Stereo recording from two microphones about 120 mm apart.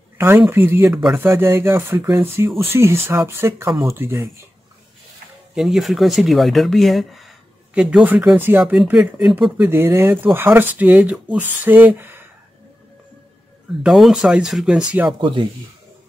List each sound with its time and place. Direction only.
0.2 s speech: 20° right (ahead or behind)
5.5 s speech: 5° right (ahead or behind)
8.7 s speech: 5° right (ahead or behind)
9.6 s speech: 20° right (ahead or behind)
13.8 s speech: 5° right (ahead or behind)
15.0 s speech: 45° right (ahead or behind)